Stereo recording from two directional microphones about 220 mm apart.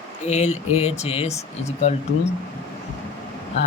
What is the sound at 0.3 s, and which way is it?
Speech, 30° left (ahead or behind).